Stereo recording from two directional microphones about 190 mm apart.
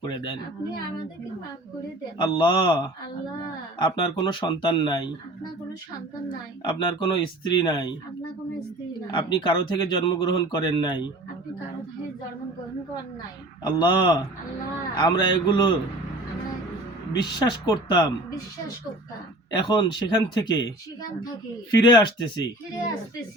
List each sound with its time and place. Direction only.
0.0 s speech: 25° left (ahead or behind)
2.1 s speech: 25° left (ahead or behind)
6.7 s speech: 25° left (ahead or behind)
13.7 s speech: 25° left (ahead or behind)
17.1 s speech: 20° left (ahead or behind)
19.5 s speech: 25° left (ahead or behind)